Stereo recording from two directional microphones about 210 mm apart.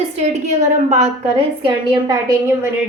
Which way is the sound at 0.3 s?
35° right (ahead or behind).